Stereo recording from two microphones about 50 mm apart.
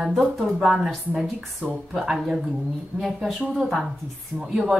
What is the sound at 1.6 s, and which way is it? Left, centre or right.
A woman's voice, centre.